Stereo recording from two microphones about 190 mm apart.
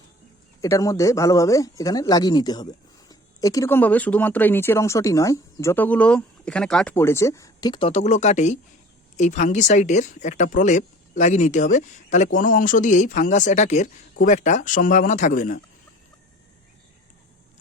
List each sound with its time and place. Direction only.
0.6 s speech: 15° left (ahead or behind); by 15.6 s 45° left (ahead or behind)